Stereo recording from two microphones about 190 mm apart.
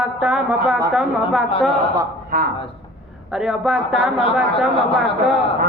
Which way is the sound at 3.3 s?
5° right (ahead or behind).